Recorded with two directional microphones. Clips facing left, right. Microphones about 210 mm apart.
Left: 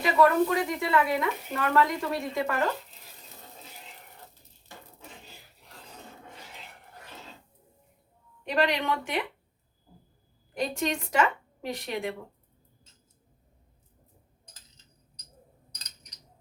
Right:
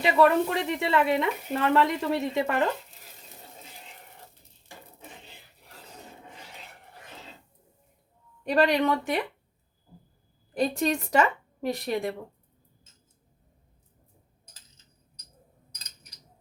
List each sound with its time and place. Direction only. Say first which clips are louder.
0.0 s a woman's voice: right 1 dB; 25° right (ahead or behind)
8.4 s a woman's voice: right 4 dB; 40° right (ahead or behind)
10.5 s a woman's voice: right 4 dB; 35° right (ahead or behind)